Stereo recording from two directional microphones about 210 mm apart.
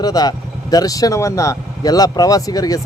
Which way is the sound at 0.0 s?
20° left (ahead or behind).